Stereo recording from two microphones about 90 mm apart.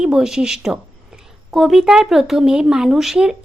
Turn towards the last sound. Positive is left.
turn(degrees=-5)  # may be behind; listen again after turning